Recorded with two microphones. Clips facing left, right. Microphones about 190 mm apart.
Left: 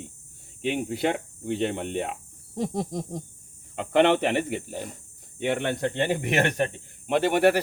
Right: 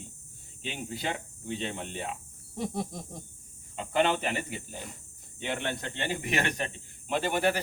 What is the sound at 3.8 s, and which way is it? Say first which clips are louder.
Speech: left 7 dB; 70° left (ahead or behind).